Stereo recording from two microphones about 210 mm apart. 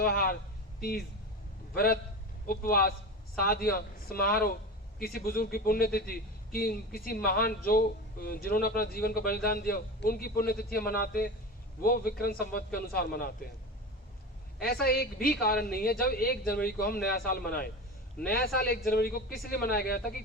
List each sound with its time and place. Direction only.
0.0 s a man's voice: 45° left (ahead or behind)
14.6 s a man's voice: 45° left (ahead or behind)